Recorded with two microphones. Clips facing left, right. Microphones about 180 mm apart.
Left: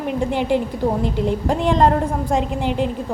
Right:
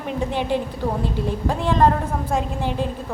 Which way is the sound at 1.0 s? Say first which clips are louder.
Left 4 dB; 20° left (ahead or behind).